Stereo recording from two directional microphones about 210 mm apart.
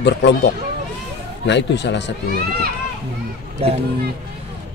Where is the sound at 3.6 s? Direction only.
30° right (ahead or behind).